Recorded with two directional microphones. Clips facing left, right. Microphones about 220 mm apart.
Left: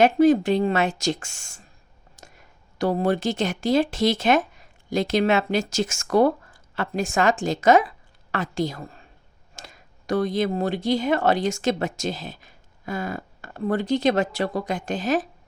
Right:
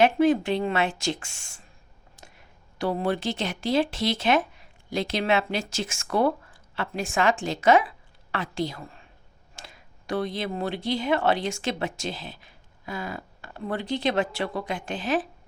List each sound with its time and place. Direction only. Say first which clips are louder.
0.0 s a woman's voice: left 4 dB; 40° left (ahead or behind)